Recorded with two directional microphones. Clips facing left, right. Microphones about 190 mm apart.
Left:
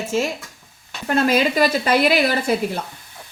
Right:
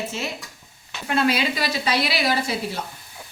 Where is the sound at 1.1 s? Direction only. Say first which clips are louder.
Left 4 dB; 45° left (ahead or behind).